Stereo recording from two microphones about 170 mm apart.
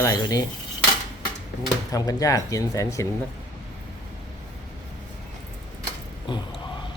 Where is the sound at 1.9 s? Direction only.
20° left (ahead or behind).